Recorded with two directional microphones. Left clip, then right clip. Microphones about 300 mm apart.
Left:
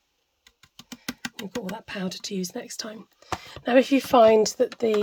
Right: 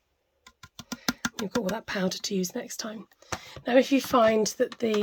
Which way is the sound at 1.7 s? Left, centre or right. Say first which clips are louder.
Right 4 dB; centre.